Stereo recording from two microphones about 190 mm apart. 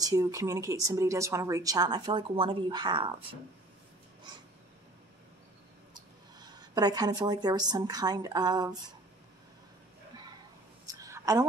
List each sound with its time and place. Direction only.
0.0 s speech: 15° right (ahead or behind)
5.9 s speech: 20° right (ahead or behind)
10.9 s a sound: 15° right (ahead or behind)